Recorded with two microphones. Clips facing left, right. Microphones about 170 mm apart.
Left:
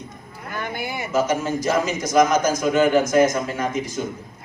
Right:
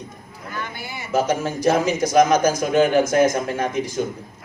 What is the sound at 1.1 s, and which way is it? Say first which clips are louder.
A man's voice: right 1 dB; 60° right (ahead or behind).